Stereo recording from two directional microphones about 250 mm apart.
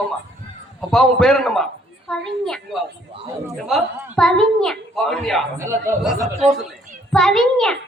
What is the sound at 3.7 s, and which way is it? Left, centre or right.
A woman's voice, centre.